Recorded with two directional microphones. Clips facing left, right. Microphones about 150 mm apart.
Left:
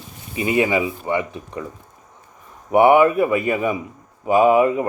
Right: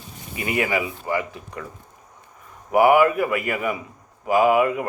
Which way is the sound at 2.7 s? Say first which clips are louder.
Left 3 dB; 25° left (ahead or behind).